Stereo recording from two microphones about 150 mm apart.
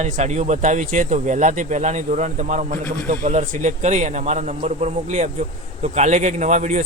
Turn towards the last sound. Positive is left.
turn(degrees=-50)  # may be behind; listen again after turning